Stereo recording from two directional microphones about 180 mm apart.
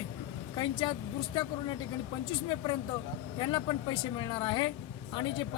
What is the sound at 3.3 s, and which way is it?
Speech, 25° left (ahead or behind).